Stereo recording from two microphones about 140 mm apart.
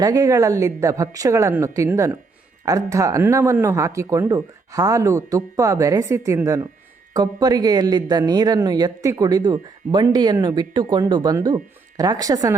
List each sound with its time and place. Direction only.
0.0 s speech: 25° right (ahead or behind)